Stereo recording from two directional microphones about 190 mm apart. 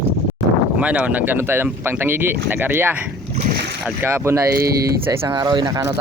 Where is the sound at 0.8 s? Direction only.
5° right (ahead or behind).